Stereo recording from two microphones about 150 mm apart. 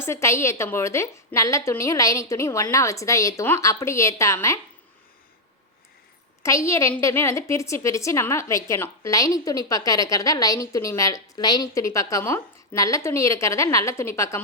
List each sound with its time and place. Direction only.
0.0 s a woman's voice: 20° left (ahead or behind)
6.4 s a woman's voice: 20° left (ahead or behind)